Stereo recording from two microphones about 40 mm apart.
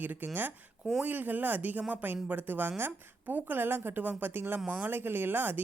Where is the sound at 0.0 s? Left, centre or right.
Right.